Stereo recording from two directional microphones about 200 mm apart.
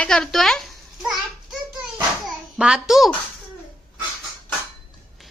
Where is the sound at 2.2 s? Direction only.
5° right (ahead or behind).